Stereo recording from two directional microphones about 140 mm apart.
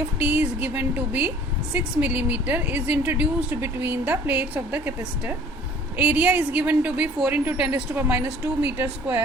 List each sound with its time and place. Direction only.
0.2 s a woman's voice: 15° right (ahead or behind)